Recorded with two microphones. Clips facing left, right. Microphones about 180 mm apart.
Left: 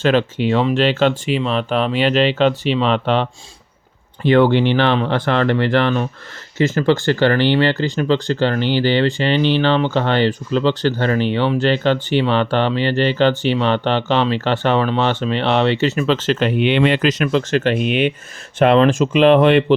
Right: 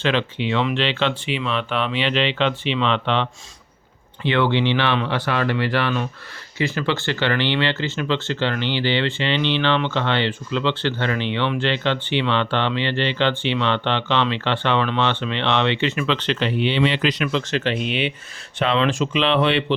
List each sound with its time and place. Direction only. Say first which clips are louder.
0.0 s speech: left 6 dB; 45° left (ahead or behind)